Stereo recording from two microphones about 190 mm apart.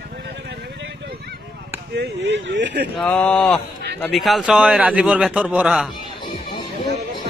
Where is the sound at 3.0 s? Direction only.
5° left (ahead or behind).